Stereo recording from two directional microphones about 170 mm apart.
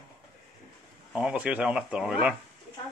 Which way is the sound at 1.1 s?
5° right (ahead or behind).